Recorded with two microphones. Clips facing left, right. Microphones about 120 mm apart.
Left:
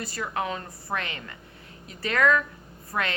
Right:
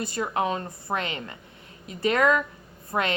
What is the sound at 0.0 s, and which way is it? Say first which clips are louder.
A woman's voice: right 4 dB; 25° right (ahead or behind).